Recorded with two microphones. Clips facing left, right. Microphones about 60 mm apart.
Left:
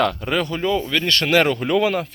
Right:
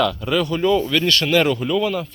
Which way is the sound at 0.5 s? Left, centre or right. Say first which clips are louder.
Right 3 dB; centre.